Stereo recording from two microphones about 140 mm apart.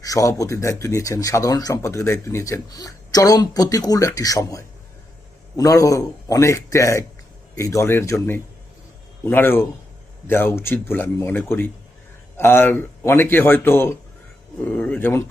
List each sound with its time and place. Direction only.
0.0 s speech: 25° left (ahead or behind)